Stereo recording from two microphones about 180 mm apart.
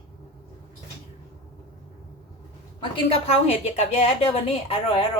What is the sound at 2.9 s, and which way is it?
A woman's voice, 35° left (ahead or behind).